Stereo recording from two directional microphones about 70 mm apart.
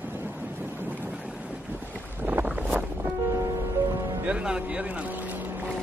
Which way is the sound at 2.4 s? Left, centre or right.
Right.